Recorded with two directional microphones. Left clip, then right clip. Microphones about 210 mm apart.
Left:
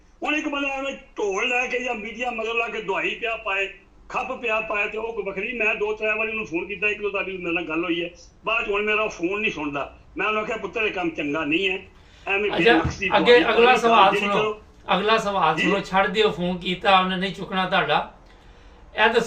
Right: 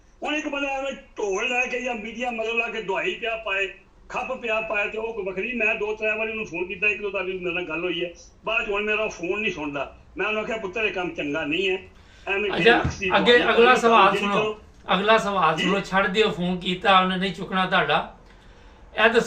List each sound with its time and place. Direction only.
0.2 s a man's voice: 15° left (ahead or behind)
18.9 s a man's voice: 5° left (ahead or behind)